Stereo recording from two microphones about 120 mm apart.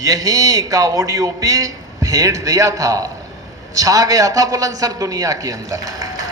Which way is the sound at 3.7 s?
30° right (ahead or behind).